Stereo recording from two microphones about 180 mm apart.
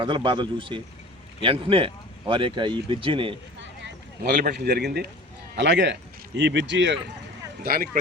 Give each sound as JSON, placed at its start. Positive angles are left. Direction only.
{"t": 0.0, "sound": "speech", "side_deg": -25}
{"t": 4.4, "sound": "speech", "side_deg": -60}
{"t": 5.5, "sound": "a man's voice", "side_deg": -75}
{"t": 7.6, "sound": "speech", "side_deg": -55}